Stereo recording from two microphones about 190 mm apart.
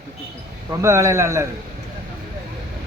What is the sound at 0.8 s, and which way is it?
Speech, 15° right (ahead or behind).